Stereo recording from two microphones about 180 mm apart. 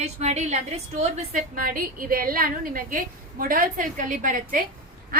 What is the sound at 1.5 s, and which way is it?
A woman's voice, 50° right (ahead or behind).